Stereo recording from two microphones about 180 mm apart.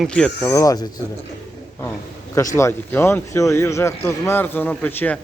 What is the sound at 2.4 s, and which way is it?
A man's voice, 15° left (ahead or behind).